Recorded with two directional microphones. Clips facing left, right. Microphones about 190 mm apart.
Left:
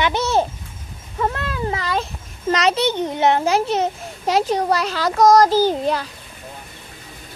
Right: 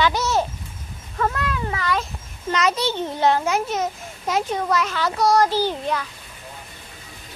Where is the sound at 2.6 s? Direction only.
20° left (ahead or behind).